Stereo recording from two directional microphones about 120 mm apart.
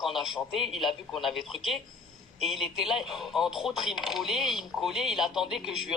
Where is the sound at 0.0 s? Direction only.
Centre (ahead or behind).